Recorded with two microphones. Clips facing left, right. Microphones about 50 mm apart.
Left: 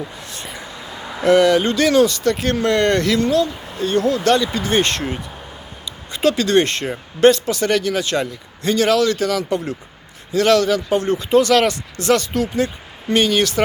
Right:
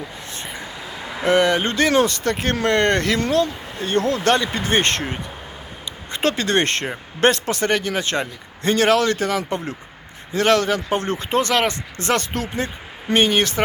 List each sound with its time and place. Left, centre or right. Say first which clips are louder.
0.3 s vehicle: even; right
1.3 s speech: left 4 dB; right
5.8 s a sound: left 4 dB; right
7.2 s speech: left 4 dB; right